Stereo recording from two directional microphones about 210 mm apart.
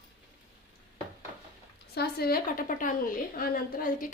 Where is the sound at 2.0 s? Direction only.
45° left (ahead or behind).